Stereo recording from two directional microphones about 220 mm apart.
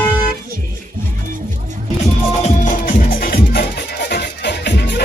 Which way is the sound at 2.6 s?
40° left (ahead or behind).